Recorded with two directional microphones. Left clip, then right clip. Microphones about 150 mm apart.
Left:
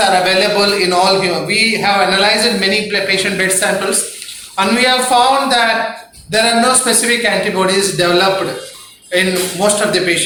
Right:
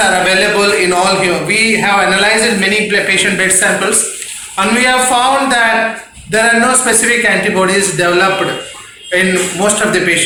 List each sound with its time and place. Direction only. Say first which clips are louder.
0.0 s a man's voice: right 1 dB; 15° left (ahead or behind)